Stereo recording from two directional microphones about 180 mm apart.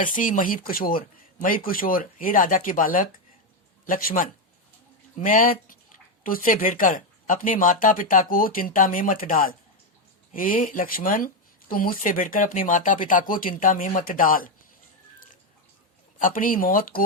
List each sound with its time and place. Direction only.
0.0 s speech: 45° left (ahead or behind)
16.1 s speech: 50° left (ahead or behind)